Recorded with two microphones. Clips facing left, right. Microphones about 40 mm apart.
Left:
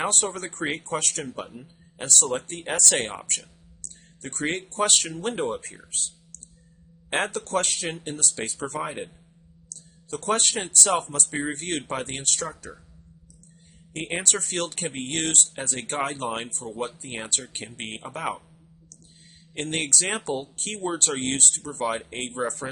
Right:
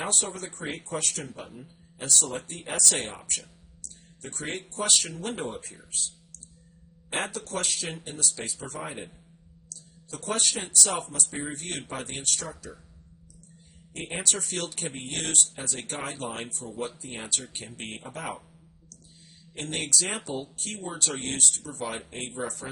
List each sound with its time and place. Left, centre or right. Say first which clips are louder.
0.0 s speech: left 5 dB; left
3.8 s music: left 2 dB; left
4.7 s speech: left 1 dB; left
7.1 s speech: left 6 dB; left
13.9 s speech: left 4 dB; left
19.5 s speech: left 3 dB; left